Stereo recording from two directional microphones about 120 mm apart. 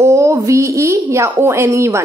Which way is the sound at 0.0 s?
25° right (ahead or behind).